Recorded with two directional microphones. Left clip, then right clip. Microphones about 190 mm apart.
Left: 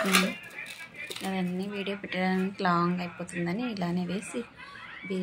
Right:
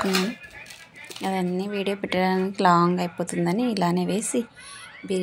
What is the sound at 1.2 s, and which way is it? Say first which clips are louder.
A woman's voice: right 9 dB; 40° right (ahead or behind).